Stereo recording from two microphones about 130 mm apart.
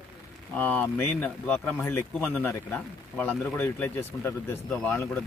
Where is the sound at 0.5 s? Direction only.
15° left (ahead or behind).